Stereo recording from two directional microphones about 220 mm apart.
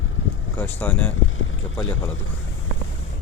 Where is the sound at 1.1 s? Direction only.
65° left (ahead or behind).